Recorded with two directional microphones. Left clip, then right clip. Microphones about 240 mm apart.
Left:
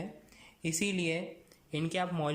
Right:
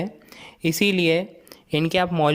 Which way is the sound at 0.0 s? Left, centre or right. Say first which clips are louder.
Right 13 dB; right.